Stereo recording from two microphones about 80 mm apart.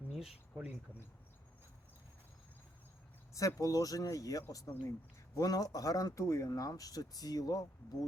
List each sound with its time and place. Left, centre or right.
0.1 s a sound: centre
3.3 s speech: left
6.1 s speech: left